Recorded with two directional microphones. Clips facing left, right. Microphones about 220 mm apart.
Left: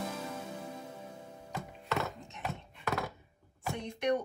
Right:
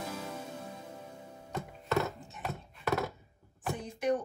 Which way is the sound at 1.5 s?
Centre (ahead or behind).